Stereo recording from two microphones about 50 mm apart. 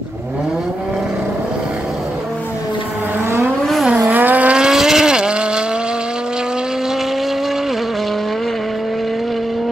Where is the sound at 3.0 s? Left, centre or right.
Right.